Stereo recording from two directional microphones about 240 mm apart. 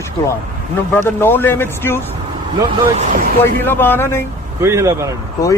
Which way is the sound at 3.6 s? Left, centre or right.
Centre.